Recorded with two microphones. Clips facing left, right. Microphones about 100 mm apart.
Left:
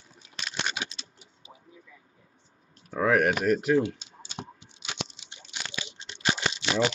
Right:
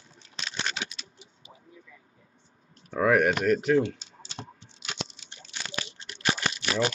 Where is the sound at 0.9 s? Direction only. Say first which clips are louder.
Right 1 dB; 30° left (ahead or behind).